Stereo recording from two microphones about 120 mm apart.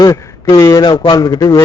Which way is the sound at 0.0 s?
35° left (ahead or behind).